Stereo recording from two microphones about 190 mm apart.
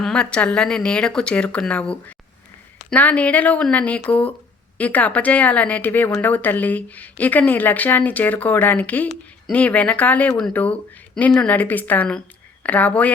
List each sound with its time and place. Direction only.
0.0 s speech: 5° left (ahead or behind)